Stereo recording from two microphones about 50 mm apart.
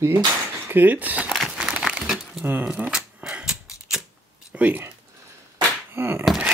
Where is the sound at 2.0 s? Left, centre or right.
Centre.